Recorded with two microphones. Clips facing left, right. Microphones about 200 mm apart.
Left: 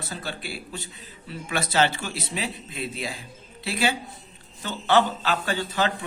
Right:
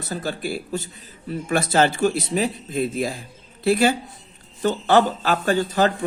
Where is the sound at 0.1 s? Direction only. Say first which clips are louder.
Right 10 dB; 45° right (ahead or behind).